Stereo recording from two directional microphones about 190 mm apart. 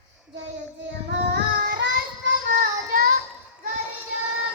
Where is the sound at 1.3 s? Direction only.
65° right (ahead or behind).